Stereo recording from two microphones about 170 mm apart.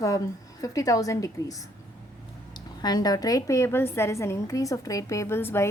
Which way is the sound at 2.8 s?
25° left (ahead or behind).